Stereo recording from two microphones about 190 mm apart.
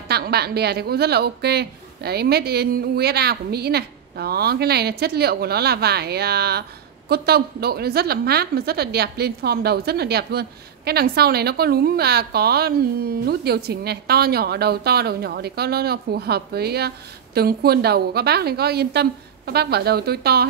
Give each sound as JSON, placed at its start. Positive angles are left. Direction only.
{"t": 0.1, "sound": "a woman's voice", "side_deg": -55}